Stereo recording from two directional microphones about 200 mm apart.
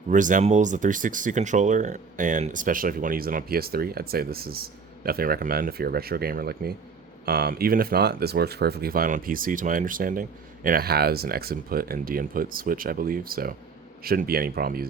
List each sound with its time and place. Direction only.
0.1 s speech: 40° right (ahead or behind)